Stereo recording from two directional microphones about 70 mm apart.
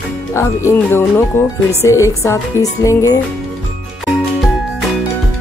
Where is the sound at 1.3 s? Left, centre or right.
Left.